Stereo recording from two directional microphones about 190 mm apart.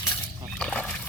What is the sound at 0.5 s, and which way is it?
Dog, 5° left (ahead or behind).